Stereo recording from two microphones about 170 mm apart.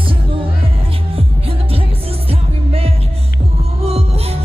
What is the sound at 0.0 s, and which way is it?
Music, 30° right (ahead or behind).